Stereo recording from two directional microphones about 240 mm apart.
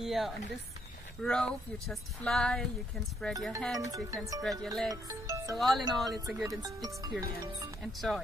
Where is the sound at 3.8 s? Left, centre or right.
Centre.